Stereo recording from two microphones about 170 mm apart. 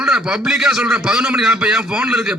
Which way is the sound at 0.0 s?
5° right (ahead or behind).